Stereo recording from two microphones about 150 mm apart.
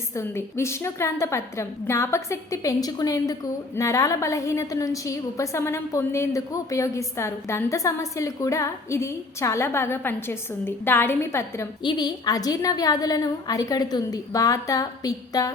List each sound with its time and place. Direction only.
0.2 s a woman's voice: 15° left (ahead or behind)
11.8 s a woman's voice: 30° left (ahead or behind)